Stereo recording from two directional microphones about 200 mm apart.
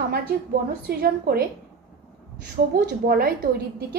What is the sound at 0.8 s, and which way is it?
Speech, 50° right (ahead or behind).